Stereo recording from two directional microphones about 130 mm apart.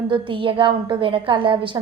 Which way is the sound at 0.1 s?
40° right (ahead or behind).